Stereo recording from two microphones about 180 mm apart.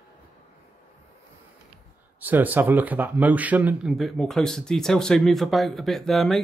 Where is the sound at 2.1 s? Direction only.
10° right (ahead or behind).